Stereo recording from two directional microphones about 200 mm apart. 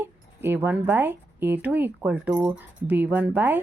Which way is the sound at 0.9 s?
10° right (ahead or behind).